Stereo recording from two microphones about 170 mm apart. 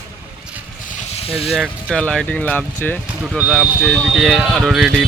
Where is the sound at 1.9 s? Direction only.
5° left (ahead or behind).